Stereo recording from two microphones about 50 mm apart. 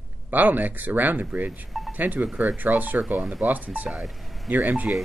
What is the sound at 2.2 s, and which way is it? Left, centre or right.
Speech, centre.